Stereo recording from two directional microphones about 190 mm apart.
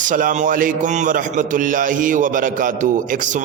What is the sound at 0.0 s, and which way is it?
A man's voice, 45° right (ahead or behind).